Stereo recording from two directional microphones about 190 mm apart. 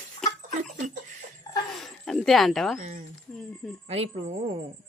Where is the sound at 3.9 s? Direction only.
30° right (ahead or behind).